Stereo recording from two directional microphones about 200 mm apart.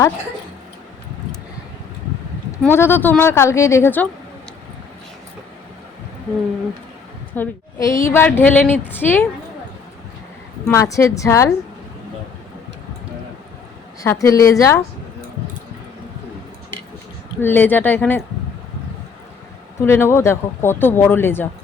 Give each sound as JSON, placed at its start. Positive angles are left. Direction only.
{"t": 2.6, "sound": "a woman's voice", "side_deg": 10}
{"t": 7.3, "sound": "a woman's voice", "side_deg": 15}
{"t": 10.7, "sound": "a woman's voice", "side_deg": 15}
{"t": 14.0, "sound": "a woman's voice", "side_deg": 15}
{"t": 17.4, "sound": "a woman's voice", "side_deg": 10}
{"t": 19.8, "sound": "a woman's voice", "side_deg": 10}